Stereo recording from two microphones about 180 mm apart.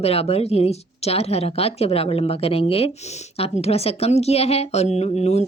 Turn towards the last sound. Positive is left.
turn(degrees=35)  # may be behind; listen again after turning